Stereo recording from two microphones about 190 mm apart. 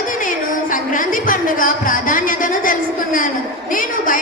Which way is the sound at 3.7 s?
45° left (ahead or behind).